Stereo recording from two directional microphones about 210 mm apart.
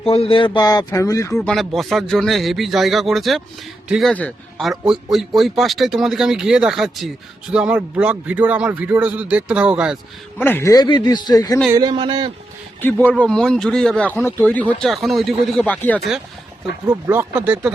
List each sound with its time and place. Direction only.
0.0 s speech: 25° left (ahead or behind)
1.4 s speech: centre (ahead or behind)
10.4 s speech: 10° left (ahead or behind)
11.7 s speech: 20° right (ahead or behind)
12.8 s speech: 5° left (ahead or behind)
16.8 s speech: 15° right (ahead or behind)